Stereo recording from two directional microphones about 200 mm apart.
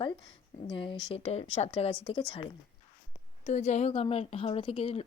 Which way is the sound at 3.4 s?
35° left (ahead or behind).